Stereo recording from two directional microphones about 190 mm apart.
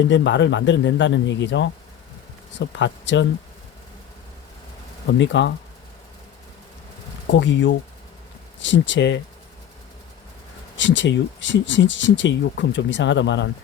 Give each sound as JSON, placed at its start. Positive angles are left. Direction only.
{"t": 0.1, "sound": "speech", "side_deg": 70}
{"t": 5.1, "sound": "speech", "side_deg": 75}
{"t": 7.3, "sound": "speech", "side_deg": 75}
{"t": 10.8, "sound": "speech", "side_deg": 75}